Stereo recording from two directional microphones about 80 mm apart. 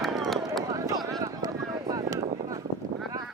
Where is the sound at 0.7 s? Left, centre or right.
Right.